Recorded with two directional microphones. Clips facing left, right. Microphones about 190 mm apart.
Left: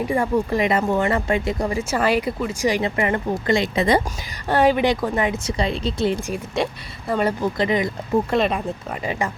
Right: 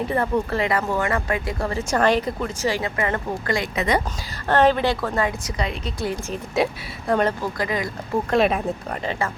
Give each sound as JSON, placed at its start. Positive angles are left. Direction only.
{"t": 0.1, "sound": "speech", "side_deg": 15}
{"t": 4.4, "sound": "speech", "side_deg": 10}
{"t": 6.6, "sound": "speech", "side_deg": 0}
{"t": 7.6, "sound": "speech", "side_deg": 20}
{"t": 8.3, "sound": "speech", "side_deg": -5}
{"t": 9.0, "sound": "speech", "side_deg": 15}